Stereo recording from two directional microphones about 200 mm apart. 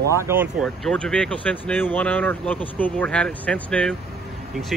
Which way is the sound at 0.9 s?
5° left (ahead or behind).